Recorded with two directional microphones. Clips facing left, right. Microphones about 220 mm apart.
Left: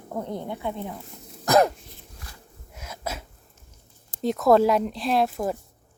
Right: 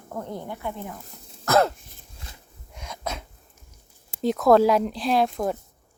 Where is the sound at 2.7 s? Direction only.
5° left (ahead or behind).